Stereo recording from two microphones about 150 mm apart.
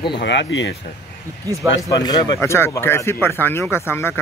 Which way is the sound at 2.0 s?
25° left (ahead or behind).